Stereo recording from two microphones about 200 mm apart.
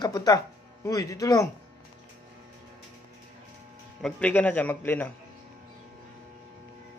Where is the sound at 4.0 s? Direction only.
5° left (ahead or behind).